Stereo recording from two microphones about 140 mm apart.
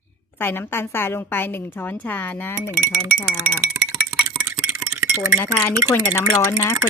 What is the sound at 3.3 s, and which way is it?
Speech, 15° right (ahead or behind).